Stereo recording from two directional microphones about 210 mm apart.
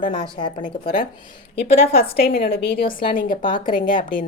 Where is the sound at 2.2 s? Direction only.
45° left (ahead or behind).